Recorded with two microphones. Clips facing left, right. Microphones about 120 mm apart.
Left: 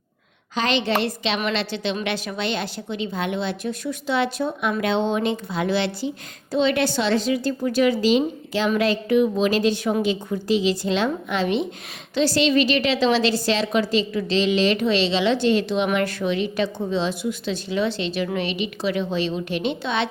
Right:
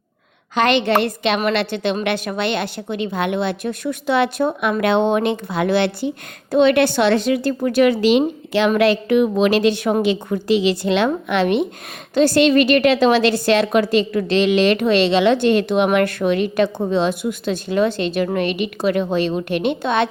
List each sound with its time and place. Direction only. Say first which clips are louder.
0.5 s a woman's voice: right 6 dB; 60° right (ahead or behind)